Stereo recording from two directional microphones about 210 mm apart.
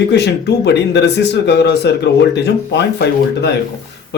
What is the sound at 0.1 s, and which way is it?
Speech, 55° left (ahead or behind).